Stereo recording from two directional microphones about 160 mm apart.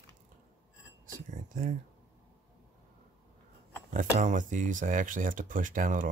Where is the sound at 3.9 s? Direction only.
50° right (ahead or behind).